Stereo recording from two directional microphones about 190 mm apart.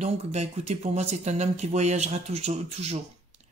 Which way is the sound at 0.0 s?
35° right (ahead or behind).